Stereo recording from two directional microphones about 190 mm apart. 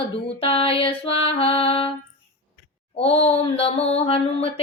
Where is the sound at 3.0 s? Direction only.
30° left (ahead or behind).